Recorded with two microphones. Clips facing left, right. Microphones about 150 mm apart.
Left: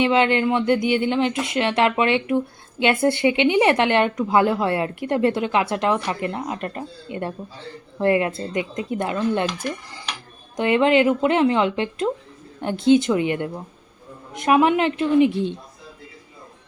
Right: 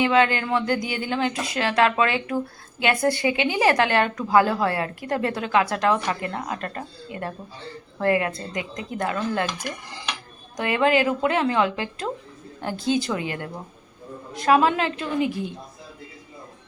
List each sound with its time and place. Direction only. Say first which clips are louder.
0.0 s speech: left 2 dB; 25° left (ahead or behind)